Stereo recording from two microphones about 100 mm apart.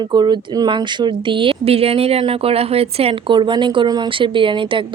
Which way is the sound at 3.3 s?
50° right (ahead or behind).